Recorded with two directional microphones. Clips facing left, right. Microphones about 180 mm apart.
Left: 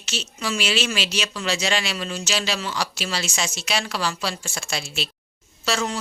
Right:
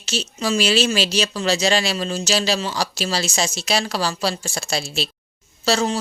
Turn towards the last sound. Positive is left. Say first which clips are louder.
# right 5 dB
turn(degrees=-35)  # may be behind; listen again after turning